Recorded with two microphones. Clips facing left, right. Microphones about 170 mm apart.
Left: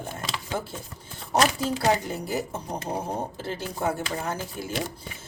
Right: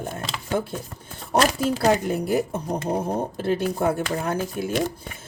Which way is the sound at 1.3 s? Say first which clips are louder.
Right 3 dB; 55° right (ahead or behind).